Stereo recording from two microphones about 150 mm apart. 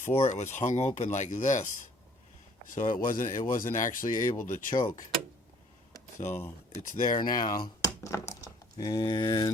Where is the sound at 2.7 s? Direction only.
65° left (ahead or behind).